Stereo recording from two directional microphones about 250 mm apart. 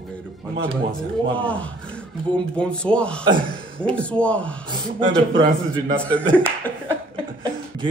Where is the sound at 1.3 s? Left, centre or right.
Centre.